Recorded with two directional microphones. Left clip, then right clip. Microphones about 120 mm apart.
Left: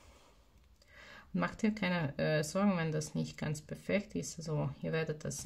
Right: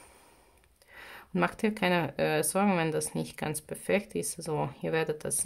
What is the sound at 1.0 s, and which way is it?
Speech, 35° right (ahead or behind).